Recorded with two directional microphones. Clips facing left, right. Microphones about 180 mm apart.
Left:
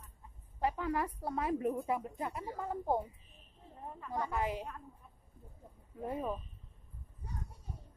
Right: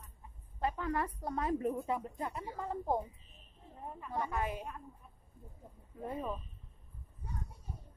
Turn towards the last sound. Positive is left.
turn(degrees=15)  # may be behind; listen again after turning